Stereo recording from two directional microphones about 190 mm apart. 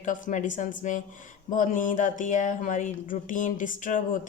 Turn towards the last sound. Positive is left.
turn(degrees=45)  # may be behind; listen again after turning